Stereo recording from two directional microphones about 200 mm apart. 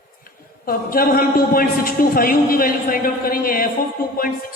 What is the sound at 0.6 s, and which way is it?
A woman's voice, 45° left (ahead or behind).